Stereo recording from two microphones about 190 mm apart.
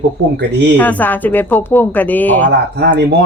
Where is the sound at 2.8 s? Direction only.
55° right (ahead or behind).